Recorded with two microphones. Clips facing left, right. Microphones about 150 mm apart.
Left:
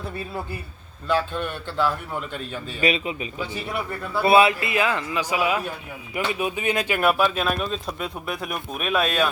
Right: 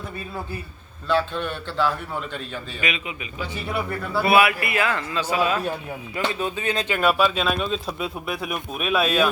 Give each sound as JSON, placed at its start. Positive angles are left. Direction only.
{"t": 1.0, "sound": "a man's voice", "side_deg": 5}
{"t": 2.8, "sound": "a man's voice", "side_deg": 35}
{"t": 4.2, "sound": "a man's voice", "side_deg": 25}
{"t": 7.9, "sound": "speech", "side_deg": -5}